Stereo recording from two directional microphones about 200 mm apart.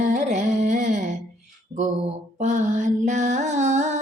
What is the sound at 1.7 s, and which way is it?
Mantra, 30° right (ahead or behind).